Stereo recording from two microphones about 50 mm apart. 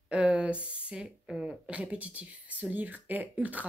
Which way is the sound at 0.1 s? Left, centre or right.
Right.